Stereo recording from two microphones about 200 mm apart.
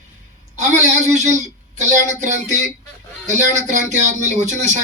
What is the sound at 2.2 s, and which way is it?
Speech, 40° right (ahead or behind).